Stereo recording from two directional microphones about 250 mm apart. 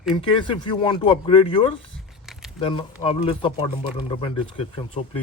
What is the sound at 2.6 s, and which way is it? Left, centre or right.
Speech, left.